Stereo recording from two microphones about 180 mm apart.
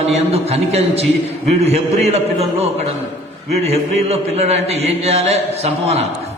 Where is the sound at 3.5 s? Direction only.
35° right (ahead or behind).